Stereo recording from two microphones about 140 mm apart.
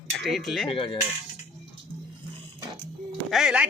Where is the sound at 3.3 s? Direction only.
Centre (ahead or behind).